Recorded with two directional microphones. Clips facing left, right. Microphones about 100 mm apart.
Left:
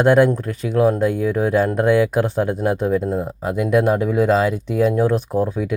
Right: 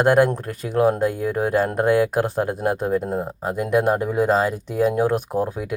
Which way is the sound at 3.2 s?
40° right (ahead or behind).